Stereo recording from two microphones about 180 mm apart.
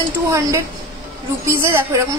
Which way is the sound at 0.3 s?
15° right (ahead or behind).